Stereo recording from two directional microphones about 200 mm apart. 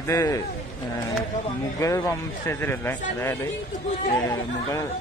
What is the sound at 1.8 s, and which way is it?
Speech, 15° left (ahead or behind).